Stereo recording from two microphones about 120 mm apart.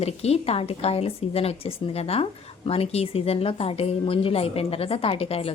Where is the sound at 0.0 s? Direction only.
60° left (ahead or behind).